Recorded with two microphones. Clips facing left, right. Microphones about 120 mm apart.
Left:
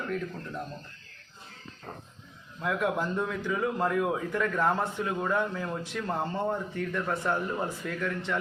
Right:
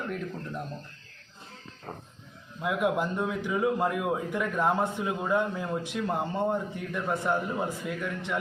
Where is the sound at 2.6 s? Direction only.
15° right (ahead or behind).